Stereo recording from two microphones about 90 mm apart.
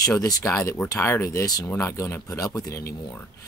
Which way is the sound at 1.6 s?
30° left (ahead or behind).